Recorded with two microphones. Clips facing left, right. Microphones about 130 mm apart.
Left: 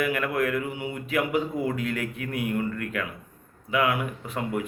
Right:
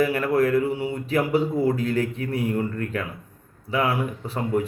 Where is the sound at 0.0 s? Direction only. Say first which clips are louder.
Right 5 dB; 35° right (ahead or behind).